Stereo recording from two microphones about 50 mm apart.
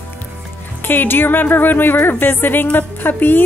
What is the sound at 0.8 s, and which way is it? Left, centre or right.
Speech, left.